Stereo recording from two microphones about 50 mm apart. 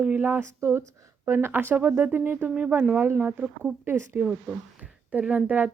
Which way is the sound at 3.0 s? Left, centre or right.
Right.